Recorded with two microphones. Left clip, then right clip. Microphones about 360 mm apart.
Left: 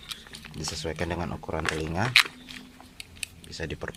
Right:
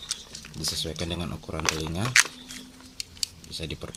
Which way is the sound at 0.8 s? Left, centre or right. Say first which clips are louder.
Left 2 dB; left.